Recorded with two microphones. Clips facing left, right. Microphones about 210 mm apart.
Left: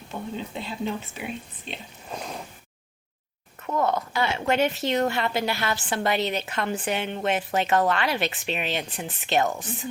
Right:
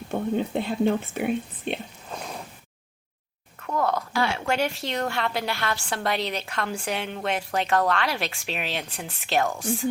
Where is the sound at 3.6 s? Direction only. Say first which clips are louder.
Left 1 dB; centre (ahead or behind).